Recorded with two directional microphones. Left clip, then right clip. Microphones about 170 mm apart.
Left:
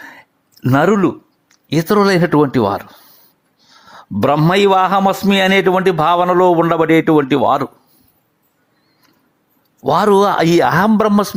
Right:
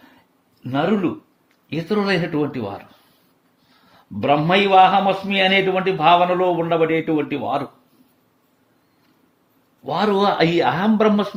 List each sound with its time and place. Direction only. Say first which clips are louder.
0.6 s a man's voice: left 8 dB; 50° left (ahead or behind)
3.9 s a man's voice: left 4 dB; 45° left (ahead or behind)
9.8 s a man's voice: left 7 dB; 55° left (ahead or behind)